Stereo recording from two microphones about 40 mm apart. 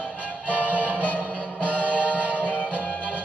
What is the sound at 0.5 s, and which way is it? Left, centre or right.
Music, right.